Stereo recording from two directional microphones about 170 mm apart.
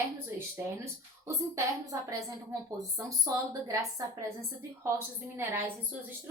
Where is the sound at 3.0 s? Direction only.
20° right (ahead or behind).